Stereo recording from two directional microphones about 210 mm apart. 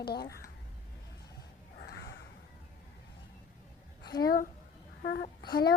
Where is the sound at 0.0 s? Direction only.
50° left (ahead or behind).